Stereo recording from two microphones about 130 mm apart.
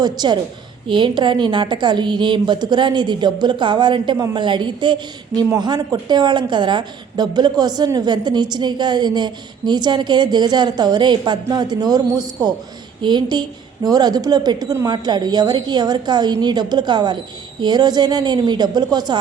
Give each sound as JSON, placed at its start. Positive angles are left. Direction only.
{"t": 0.0, "sound": "a woman's voice", "side_deg": -35}